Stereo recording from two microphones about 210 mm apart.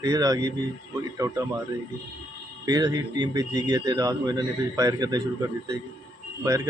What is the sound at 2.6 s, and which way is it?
Speech, 20° right (ahead or behind).